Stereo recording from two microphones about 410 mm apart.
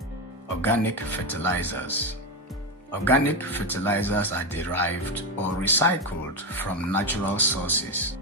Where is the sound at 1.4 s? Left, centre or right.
Centre.